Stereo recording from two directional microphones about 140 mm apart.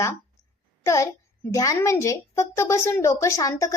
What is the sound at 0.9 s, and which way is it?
A woman's voice, 20° left (ahead or behind).